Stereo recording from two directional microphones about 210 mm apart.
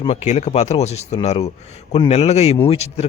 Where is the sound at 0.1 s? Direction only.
35° left (ahead or behind).